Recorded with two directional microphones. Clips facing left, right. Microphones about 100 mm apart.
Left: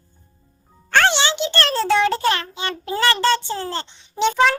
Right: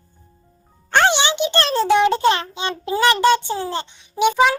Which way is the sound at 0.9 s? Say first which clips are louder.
Right 1 dB; 20° right (ahead or behind).